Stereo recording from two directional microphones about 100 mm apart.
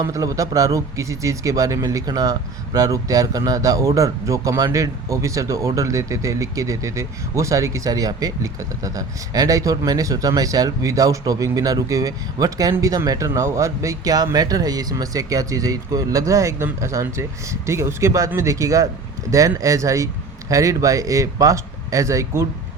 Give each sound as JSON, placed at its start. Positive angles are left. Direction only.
{"t": 0.0, "sound": "speech", "side_deg": -35}